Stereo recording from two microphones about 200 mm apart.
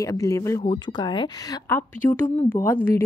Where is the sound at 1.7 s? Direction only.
10° left (ahead or behind).